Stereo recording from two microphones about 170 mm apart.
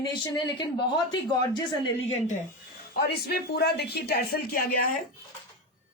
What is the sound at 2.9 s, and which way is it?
Speech, 70° left (ahead or behind).